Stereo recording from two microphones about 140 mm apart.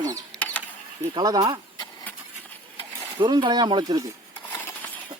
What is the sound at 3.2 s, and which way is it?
Speech, 35° right (ahead or behind).